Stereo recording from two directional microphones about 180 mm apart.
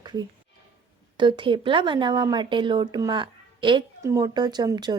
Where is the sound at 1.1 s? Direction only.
25° right (ahead or behind).